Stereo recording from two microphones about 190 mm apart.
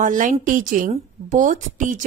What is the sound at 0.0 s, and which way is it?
A woman's voice, 45° right (ahead or behind).